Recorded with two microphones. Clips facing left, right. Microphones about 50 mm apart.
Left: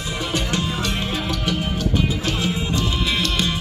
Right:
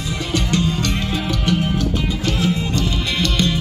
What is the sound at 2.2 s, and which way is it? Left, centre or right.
Music, centre.